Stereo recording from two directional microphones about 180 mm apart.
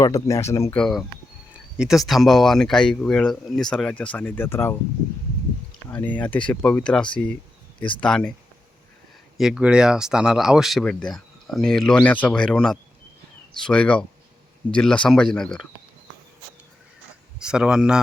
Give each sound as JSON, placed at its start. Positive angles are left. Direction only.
{"t": 0.0, "sound": "speech", "side_deg": 15}
{"t": 0.8, "sound": "speech", "side_deg": 0}
{"t": 5.9, "sound": "speech", "side_deg": 10}
{"t": 9.4, "sound": "speech", "side_deg": -5}
{"t": 17.4, "sound": "speech", "side_deg": -5}